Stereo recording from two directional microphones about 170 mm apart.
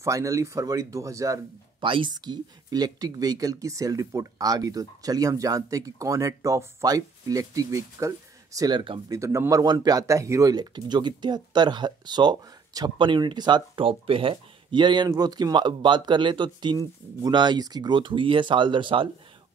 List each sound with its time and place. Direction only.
0.0 s speech: 20° right (ahead or behind)
9.2 s speech: 15° right (ahead or behind)